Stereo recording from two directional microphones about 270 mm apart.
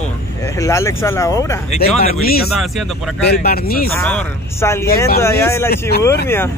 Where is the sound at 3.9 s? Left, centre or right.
Centre.